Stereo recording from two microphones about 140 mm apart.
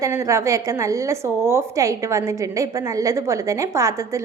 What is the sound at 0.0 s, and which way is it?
A woman's voice, 20° right (ahead or behind).